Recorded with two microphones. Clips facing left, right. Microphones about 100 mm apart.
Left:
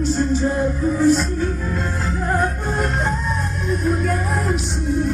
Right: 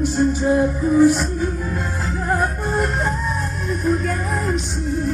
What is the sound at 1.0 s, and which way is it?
Music, 10° right (ahead or behind).